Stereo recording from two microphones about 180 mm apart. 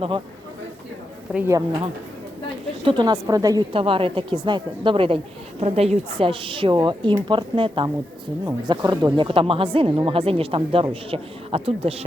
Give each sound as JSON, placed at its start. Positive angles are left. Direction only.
{"t": 1.3, "sound": "speech", "side_deg": -5}
{"t": 1.5, "sound": "a woman's voice", "side_deg": -25}